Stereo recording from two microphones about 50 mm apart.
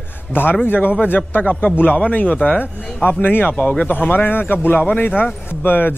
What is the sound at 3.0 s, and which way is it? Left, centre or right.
Speech, left.